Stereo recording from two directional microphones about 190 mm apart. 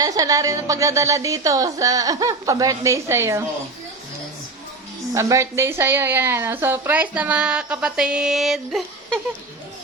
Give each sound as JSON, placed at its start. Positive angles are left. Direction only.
{"t": 0.0, "sound": "a woman's voice", "side_deg": -20}
{"t": 5.1, "sound": "a woman's voice", "side_deg": -15}